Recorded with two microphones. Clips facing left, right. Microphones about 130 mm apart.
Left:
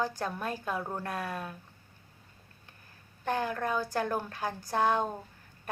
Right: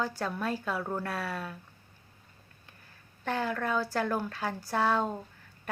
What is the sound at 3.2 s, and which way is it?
A woman's voice, 15° left (ahead or behind).